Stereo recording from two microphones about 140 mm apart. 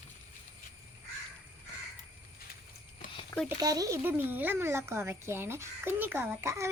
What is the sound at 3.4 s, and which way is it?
Speech, 25° right (ahead or behind).